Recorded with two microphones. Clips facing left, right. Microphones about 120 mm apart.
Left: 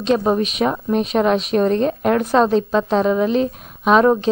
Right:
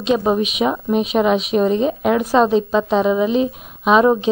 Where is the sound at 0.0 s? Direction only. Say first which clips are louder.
Even; 5° right (ahead or behind).